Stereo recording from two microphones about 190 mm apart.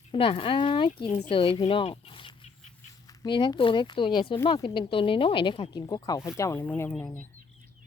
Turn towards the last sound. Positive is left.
turn(degrees=5)  # may be behind; listen again after turning